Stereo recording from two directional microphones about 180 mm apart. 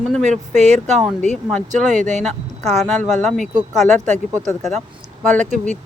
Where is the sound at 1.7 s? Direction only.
45° right (ahead or behind).